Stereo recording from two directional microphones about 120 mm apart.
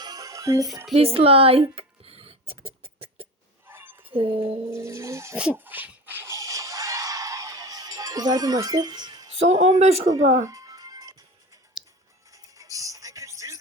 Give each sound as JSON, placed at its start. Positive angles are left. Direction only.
{"t": 0.0, "sound": "music", "side_deg": -30}
{"t": 0.9, "sound": "a sound", "side_deg": -55}
{"t": 3.7, "sound": "a sound", "side_deg": -20}
{"t": 4.1, "sound": "speech", "side_deg": -50}
{"t": 4.7, "sound": "music", "side_deg": -25}
{"t": 5.4, "sound": "a sound", "side_deg": -15}
{"t": 9.3, "sound": "a man's voice", "side_deg": -70}
{"t": 10.4, "sound": "music", "side_deg": -30}
{"t": 12.3, "sound": "music", "side_deg": -30}